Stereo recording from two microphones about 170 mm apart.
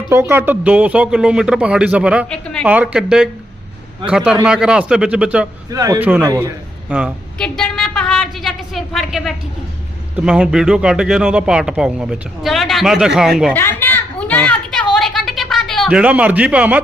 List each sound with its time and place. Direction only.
0.1 s speech: 10° right (ahead or behind)
2.3 s speech: 5° left (ahead or behind)
2.6 s speech: 5° right (ahead or behind)
5.7 s a man's voice: 20° right (ahead or behind)
6.0 s speech: 10° right (ahead or behind)
6.2 s a man's voice: 20° right (ahead or behind)
6.8 s a woman's voice: 5° right (ahead or behind)
7.3 s a sound: 5° left (ahead or behind)
10.2 s speech: 5° right (ahead or behind)
13.5 s a sound: 10° left (ahead or behind); by 16.8 s 10° right (ahead or behind)